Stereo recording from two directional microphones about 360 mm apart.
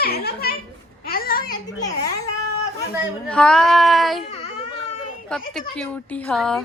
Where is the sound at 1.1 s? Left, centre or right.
Left.